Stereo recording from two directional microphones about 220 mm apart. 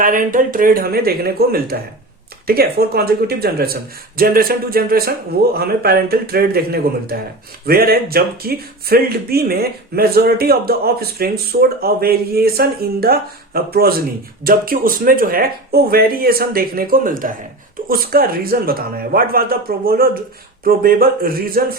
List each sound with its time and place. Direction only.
0.0 s speech: 40° right (ahead or behind)